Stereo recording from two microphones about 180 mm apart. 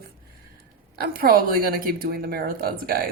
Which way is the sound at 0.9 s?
55° right (ahead or behind).